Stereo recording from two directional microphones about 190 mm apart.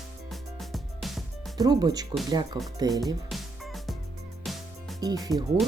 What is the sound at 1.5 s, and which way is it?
Speech, 20° right (ahead or behind).